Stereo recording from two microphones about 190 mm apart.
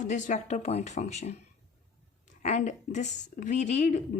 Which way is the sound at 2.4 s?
35° left (ahead or behind).